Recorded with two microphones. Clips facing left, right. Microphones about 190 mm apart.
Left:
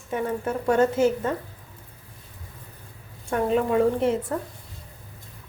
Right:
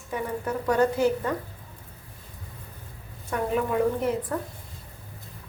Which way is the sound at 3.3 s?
30° left (ahead or behind).